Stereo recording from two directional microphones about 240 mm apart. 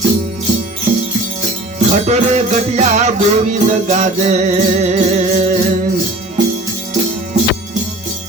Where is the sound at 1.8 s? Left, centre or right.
Right.